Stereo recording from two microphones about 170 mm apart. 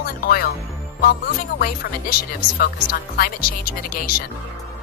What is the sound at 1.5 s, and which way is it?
Speech, 60° left (ahead or behind).